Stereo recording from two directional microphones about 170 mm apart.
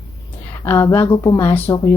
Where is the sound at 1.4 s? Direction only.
15° left (ahead or behind).